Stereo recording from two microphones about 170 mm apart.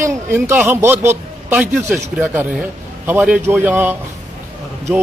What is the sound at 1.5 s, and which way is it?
Speech, centre (ahead or behind).